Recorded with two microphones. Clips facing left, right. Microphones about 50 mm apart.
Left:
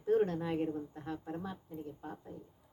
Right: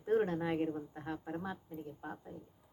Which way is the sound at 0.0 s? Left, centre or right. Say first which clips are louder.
Left 1 dB; centre.